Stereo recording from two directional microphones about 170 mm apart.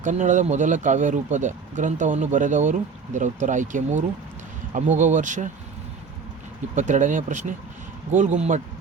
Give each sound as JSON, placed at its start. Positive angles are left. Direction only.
{"t": 0.0, "sound": "speech", "side_deg": -45}
{"t": 6.7, "sound": "speech", "side_deg": -45}